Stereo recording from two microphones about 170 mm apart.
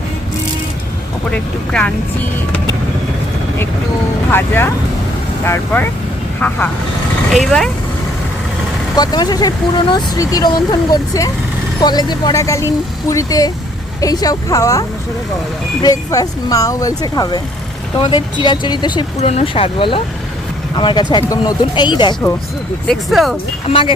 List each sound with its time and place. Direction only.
1.3 s speech: 5° left (ahead or behind)
4.3 s speech: 15° left (ahead or behind)
9.0 s speech: 25° left (ahead or behind)
22.9 s speech: centre (ahead or behind)
23.6 s speech: 30° left (ahead or behind)